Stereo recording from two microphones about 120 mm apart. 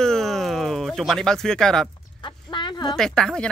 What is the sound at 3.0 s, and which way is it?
Speech, 5° left (ahead or behind).